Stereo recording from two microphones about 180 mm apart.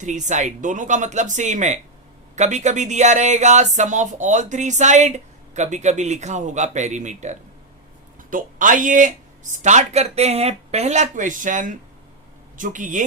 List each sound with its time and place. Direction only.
0.0 s speech: 40° right (ahead or behind)